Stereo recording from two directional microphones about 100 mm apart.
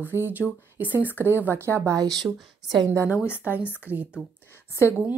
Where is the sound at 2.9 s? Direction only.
20° right (ahead or behind).